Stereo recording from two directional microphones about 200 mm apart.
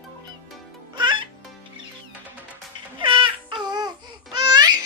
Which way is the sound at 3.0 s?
25° right (ahead or behind).